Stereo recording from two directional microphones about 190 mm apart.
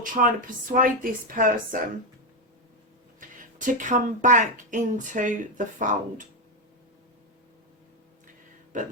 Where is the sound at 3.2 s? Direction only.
45° right (ahead or behind).